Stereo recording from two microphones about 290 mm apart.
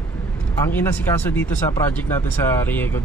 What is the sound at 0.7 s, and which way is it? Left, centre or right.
Speech, centre.